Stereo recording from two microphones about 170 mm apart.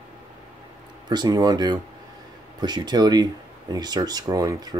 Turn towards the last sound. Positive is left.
turn(degrees=-20)  # may be behind; listen again after turning